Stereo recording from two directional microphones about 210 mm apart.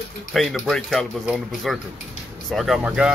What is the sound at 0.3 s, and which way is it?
Speech, centre (ahead or behind).